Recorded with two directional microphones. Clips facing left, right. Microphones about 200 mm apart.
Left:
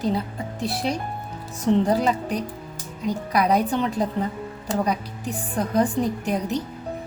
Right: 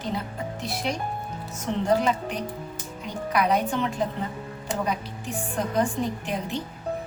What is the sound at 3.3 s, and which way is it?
Speech, 35° left (ahead or behind).